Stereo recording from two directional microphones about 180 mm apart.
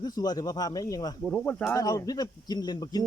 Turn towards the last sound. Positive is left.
turn(degrees=20)  # may be behind; listen again after turning